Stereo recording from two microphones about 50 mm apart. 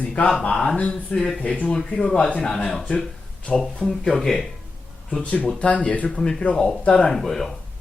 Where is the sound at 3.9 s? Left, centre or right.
Centre.